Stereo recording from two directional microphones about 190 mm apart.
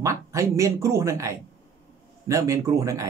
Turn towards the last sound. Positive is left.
turn(degrees=-15)  # may be behind; listen again after turning